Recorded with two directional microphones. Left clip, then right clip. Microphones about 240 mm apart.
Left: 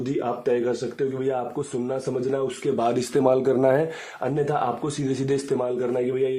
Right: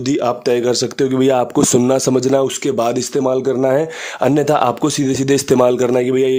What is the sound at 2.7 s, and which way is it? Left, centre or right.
A man's voice, right.